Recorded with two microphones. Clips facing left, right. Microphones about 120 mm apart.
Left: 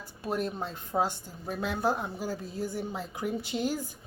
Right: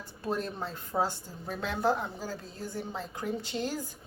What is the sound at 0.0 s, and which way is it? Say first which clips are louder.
Speech: left 1 dB; 15° left (ahead or behind).